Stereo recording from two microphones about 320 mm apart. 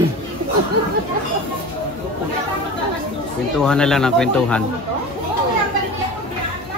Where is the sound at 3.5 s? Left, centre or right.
Centre.